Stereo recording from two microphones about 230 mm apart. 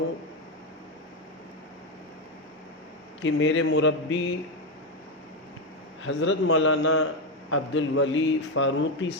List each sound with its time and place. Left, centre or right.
3.2 s a man's voice: left
6.1 s speech: left
7.5 s speech: left